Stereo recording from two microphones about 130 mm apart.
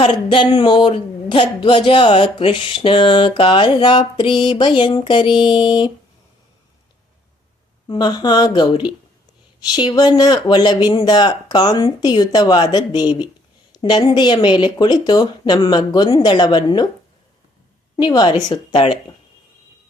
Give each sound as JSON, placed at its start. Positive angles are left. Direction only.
{"t": 0.0, "sound": "a woman's voice", "side_deg": 40}
{"t": 7.9, "sound": "a woman's voice", "side_deg": 35}
{"t": 17.9, "sound": "a woman's voice", "side_deg": 35}